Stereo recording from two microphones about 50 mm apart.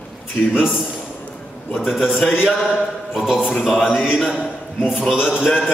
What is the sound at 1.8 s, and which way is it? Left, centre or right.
Speech, centre.